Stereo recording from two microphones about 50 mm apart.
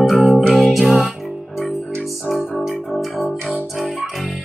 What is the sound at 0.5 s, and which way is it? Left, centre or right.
Music, centre.